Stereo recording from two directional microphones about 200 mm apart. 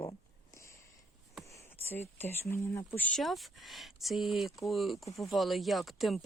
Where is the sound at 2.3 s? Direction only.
15° left (ahead or behind).